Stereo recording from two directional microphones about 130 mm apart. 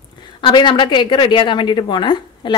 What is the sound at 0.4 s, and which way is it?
A woman's voice, 40° left (ahead or behind).